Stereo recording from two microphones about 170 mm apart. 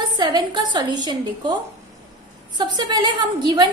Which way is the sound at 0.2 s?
25° right (ahead or behind).